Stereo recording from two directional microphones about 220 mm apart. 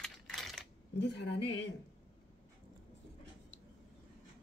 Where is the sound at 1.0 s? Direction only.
50° left (ahead or behind).